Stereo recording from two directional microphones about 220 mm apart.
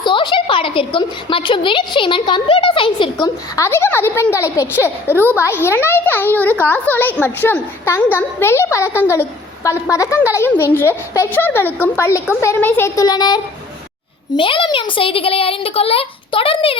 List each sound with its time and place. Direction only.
0.0 s a woman's voice: 20° left (ahead or behind)